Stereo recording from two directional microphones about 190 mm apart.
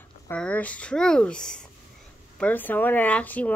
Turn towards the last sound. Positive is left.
turn(degrees=10)  # may be behind; listen again after turning